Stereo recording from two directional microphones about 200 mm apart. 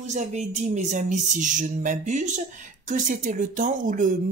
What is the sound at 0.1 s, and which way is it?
Speech, 35° right (ahead or behind).